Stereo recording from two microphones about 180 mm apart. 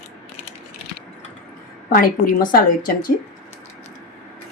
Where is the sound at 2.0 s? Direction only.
50° left (ahead or behind).